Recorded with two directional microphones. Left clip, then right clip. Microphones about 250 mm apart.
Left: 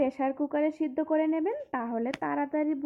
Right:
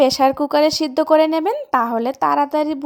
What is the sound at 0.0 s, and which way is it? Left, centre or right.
Speech, right.